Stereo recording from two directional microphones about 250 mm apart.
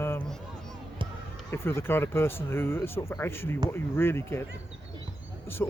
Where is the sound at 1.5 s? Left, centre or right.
Centre.